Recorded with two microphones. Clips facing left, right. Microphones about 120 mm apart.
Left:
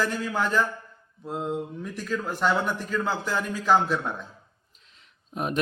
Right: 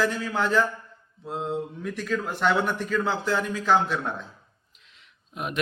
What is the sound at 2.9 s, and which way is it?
Speech, 10° left (ahead or behind).